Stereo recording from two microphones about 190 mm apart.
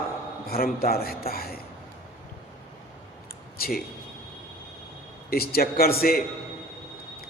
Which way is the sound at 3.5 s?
50° left (ahead or behind).